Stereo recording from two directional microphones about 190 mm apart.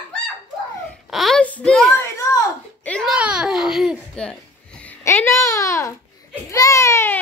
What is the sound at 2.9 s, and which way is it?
Babbling, centre (ahead or behind).